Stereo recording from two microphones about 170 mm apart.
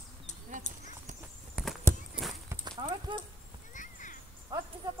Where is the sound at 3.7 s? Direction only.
50° left (ahead or behind).